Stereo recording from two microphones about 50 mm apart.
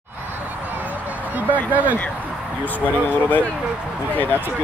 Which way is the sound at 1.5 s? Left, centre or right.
Right.